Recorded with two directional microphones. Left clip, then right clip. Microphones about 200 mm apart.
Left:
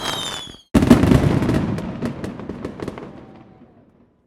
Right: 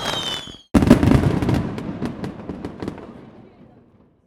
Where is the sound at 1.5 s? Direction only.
Centre (ahead or behind).